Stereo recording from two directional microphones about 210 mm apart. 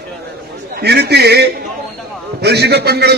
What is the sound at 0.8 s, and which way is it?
A man's voice, 50° right (ahead or behind).